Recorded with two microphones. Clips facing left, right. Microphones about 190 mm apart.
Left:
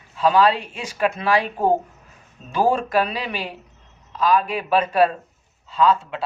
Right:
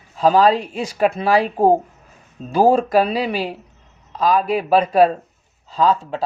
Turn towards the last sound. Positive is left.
turn(degrees=-40)  # may be behind; listen again after turning